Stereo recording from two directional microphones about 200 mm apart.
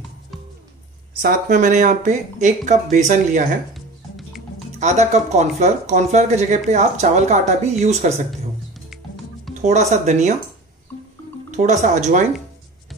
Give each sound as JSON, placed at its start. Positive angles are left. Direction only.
{"t": 1.2, "sound": "speech", "side_deg": -40}
{"t": 3.7, "sound": "music", "side_deg": 0}
{"t": 4.7, "sound": "speech", "side_deg": -35}
{"t": 9.5, "sound": "speech", "side_deg": -35}
{"t": 11.5, "sound": "speech", "side_deg": -35}